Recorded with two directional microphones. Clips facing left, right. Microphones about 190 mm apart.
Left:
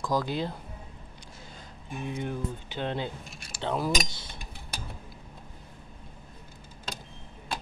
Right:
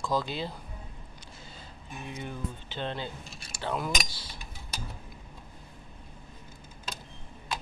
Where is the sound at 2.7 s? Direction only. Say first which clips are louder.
Left 3 dB; 15° left (ahead or behind).